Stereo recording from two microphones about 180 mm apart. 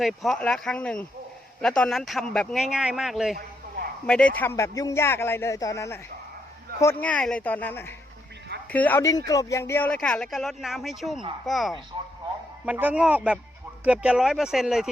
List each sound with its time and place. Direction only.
0.0 s a man's voice: centre (ahead or behind)